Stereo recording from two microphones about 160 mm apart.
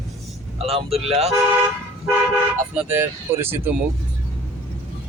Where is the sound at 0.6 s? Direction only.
40° right (ahead or behind).